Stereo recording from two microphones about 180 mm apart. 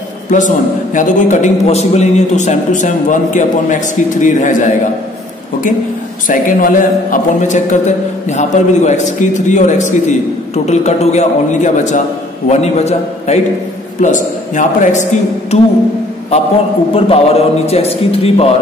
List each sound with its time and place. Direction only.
0.3 s a man's voice: 40° left (ahead or behind)
6.2 s a man's voice: 50° left (ahead or behind)
16.9 s a man's voice: 35° left (ahead or behind)